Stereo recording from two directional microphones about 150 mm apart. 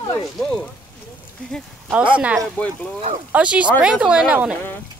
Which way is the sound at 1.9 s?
10° right (ahead or behind).